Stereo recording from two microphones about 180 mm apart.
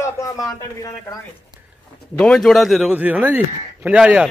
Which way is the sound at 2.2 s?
5° left (ahead or behind).